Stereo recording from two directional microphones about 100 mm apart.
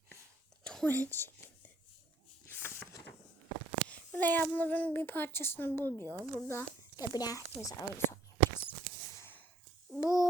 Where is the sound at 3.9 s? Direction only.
15° left (ahead or behind).